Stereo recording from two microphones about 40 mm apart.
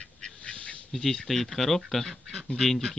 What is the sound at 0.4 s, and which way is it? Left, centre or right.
Duck, left.